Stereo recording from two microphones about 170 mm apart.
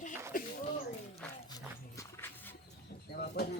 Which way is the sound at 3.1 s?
70° left (ahead or behind).